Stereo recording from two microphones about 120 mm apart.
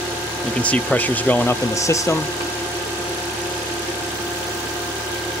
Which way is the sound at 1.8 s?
25° left (ahead or behind).